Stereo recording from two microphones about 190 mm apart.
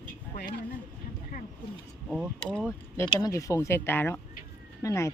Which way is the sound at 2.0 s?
5° right (ahead or behind).